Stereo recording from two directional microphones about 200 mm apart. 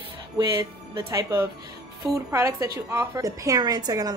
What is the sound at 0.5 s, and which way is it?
A woman's voice, 20° right (ahead or behind).